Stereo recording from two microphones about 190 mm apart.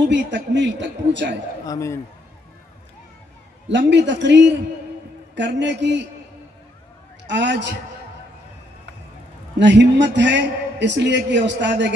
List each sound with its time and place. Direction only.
0.1 s a man's voice: 70° right (ahead or behind)
1.7 s a man's voice: 15° left (ahead or behind)
3.6 s a man's voice: 70° right (ahead or behind)
7.2 s a man's voice: 70° right (ahead or behind)
9.6 s a man's voice: 70° right (ahead or behind)